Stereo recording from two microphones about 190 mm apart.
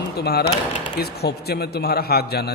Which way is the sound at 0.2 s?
55° left (ahead or behind).